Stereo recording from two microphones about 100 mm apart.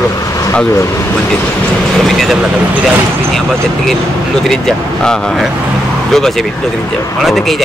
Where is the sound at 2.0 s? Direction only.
Centre (ahead or behind).